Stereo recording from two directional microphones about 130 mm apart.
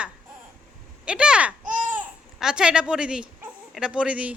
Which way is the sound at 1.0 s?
5° right (ahead or behind).